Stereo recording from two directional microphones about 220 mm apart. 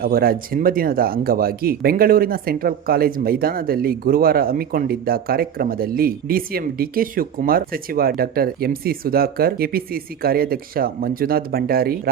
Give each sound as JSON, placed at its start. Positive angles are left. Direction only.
{"t": 0.0, "sound": "speech", "side_deg": -40}